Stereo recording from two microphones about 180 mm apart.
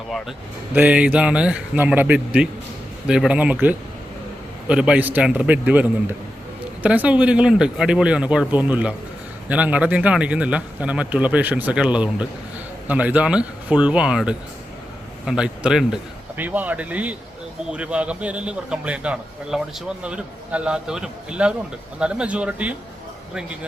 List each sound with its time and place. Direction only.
0.1 s a man's voice: 5° right (ahead or behind)